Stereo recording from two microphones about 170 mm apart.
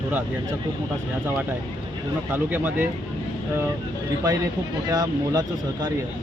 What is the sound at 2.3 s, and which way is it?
Speech, 10° right (ahead or behind).